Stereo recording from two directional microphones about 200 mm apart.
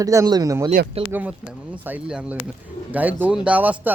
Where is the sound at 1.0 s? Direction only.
30° right (ahead or behind).